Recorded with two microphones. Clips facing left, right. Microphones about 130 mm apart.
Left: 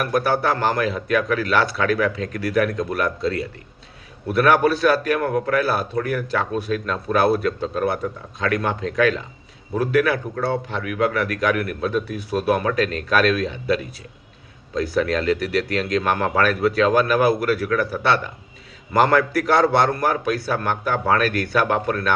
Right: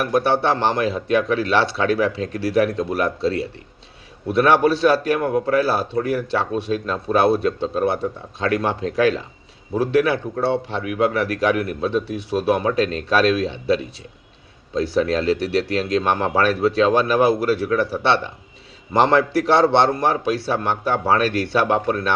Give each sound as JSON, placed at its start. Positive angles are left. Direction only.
{"t": 0.0, "sound": "speech", "side_deg": -25}